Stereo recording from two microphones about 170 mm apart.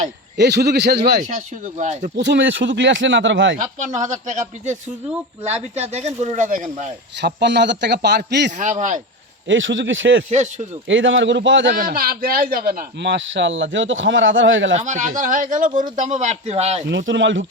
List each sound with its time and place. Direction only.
0.3 s a man's voice: 80° right
1.8 s speech: 45° right (ahead or behind)
2.1 s a man's voice: 90° right
3.6 s speech: 50° right (ahead or behind)
7.2 s a man's voice: 85° right
8.5 s speech: 45° right (ahead or behind)
9.5 s a man's voice: 90° right
10.2 s speech: 45° right (ahead or behind)
10.8 s a man's voice: 90° right
14.7 s speech: 45° right (ahead or behind)
16.9 s a man's voice: 90° right